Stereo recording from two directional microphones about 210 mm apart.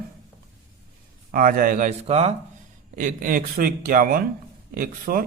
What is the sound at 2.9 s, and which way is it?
Speech, 40° right (ahead or behind).